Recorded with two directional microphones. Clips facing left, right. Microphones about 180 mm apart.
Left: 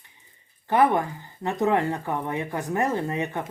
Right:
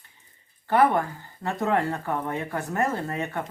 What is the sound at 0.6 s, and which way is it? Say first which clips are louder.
Speech: even; 15° left (ahead or behind).